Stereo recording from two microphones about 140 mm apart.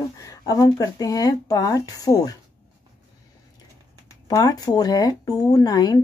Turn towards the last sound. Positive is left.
turn(degrees=25)  # may be behind; listen again after turning